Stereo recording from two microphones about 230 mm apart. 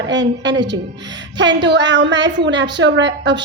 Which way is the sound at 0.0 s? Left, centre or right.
Right.